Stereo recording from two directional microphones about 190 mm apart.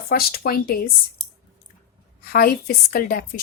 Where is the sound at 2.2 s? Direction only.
55° left (ahead or behind).